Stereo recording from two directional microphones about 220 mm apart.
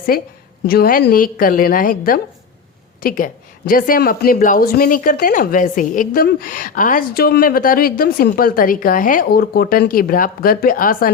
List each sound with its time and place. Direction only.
0.1 s speech: 40° left (ahead or behind)